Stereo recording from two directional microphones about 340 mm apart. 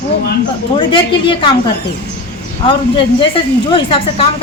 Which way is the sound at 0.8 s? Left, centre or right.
Centre.